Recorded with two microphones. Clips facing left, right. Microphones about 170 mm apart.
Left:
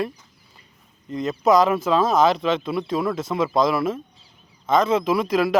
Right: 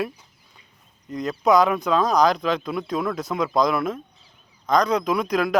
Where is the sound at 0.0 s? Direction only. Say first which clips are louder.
Left 1 dB; centre (ahead or behind).